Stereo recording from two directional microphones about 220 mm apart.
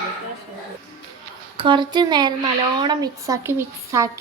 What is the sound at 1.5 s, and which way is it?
A woman's voice, 20° right (ahead or behind).